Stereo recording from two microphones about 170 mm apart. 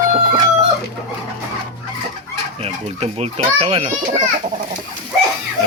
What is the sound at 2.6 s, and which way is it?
Speech, 35° right (ahead or behind).